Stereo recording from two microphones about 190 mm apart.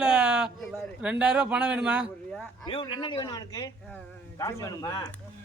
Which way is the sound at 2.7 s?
25° left (ahead or behind).